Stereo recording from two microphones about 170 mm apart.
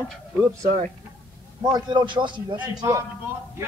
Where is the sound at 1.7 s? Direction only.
25° right (ahead or behind).